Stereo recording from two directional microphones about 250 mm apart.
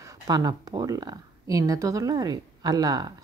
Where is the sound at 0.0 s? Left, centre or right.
Centre.